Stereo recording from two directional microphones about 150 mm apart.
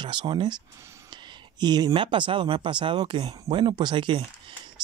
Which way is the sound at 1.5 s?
25° right (ahead or behind).